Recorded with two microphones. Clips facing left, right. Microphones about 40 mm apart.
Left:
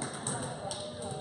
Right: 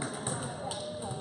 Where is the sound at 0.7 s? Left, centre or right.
Centre.